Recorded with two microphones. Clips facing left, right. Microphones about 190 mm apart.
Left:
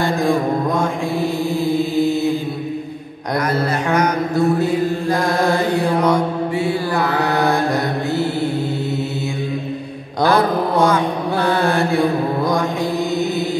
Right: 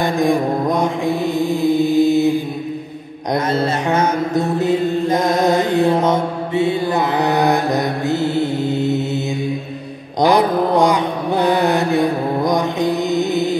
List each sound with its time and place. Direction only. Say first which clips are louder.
0.0 s mantra: right 1 dB; 20° right (ahead or behind)
3.5 s mantra: left 1 dB; 25° right (ahead or behind)
10.2 s mantra: right 2 dB; 15° right (ahead or behind)